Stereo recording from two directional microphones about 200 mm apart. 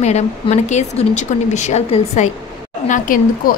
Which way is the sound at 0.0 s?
35° left (ahead or behind).